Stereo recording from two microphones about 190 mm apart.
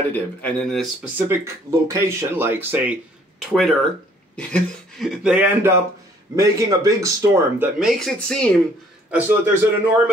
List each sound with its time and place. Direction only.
0.1 s speech: 5° left (ahead or behind)
1.1 s speech: 15° right (ahead or behind)
8.0 s speech: 5° left (ahead or behind)
9.1 s speech: 10° right (ahead or behind)